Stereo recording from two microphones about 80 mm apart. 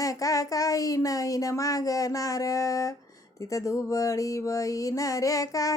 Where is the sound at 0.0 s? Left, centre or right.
Left.